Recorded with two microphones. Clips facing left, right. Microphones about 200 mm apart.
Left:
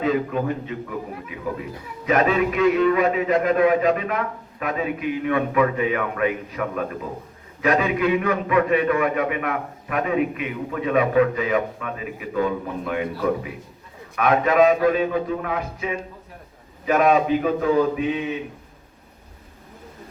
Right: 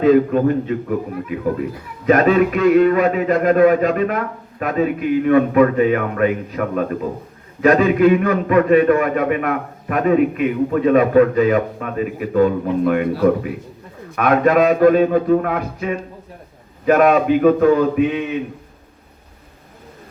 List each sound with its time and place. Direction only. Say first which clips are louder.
0.0 s a man's voice: right 9 dB; 50° right (ahead or behind)
2.0 s a man's voice: right 6 dB; 45° right (ahead or behind); by 18.3 s 65° right (ahead or behind)